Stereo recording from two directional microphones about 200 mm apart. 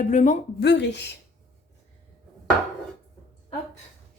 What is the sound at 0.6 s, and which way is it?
Speech, 60° left (ahead or behind).